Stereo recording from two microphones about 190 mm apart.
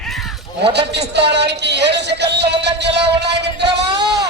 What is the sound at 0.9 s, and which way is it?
Music, 65° right (ahead or behind).